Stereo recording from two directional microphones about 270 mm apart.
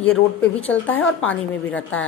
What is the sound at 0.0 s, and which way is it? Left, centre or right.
A woman's voice, centre.